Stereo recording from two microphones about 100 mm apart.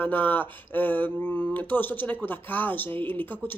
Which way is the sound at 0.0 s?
20° left (ahead or behind).